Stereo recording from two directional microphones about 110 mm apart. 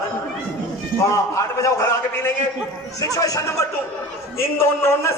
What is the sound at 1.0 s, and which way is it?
A man's voice, 30° left (ahead or behind).